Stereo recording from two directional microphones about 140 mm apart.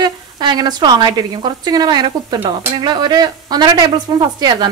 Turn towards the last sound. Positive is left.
turn(degrees=-30)  # may be behind; listen again after turning